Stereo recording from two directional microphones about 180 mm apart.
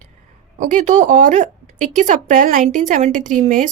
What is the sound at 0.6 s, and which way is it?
A woman's voice, 45° right (ahead or behind).